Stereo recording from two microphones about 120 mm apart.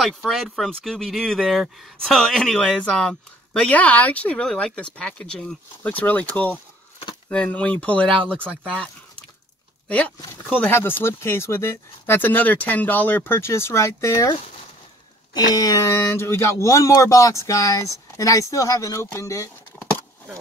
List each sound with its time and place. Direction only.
0.0 s speech: centre (ahead or behind); by 14.3 s 25° left (ahead or behind)
15.3 s speech: 30° left (ahead or behind)